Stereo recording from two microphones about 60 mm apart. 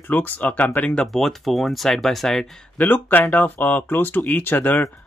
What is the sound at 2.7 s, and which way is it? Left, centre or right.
Speech, left.